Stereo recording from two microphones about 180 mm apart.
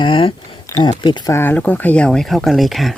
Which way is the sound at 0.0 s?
30° left (ahead or behind).